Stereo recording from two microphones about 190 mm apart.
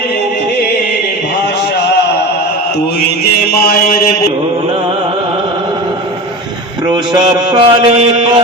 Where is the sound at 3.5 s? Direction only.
50° left (ahead or behind).